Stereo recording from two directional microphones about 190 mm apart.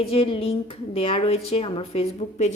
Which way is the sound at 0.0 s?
30° left (ahead or behind).